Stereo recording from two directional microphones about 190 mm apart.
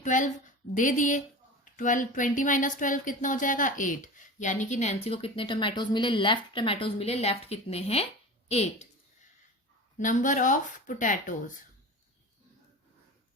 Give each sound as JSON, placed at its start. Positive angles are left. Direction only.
{"t": 0.0, "sound": "a woman's voice", "side_deg": 40}
{"t": 10.0, "sound": "speech", "side_deg": 40}